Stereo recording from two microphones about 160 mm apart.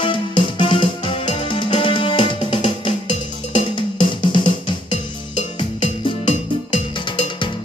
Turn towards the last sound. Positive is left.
turn(degrees=30)  # may be behind; listen again after turning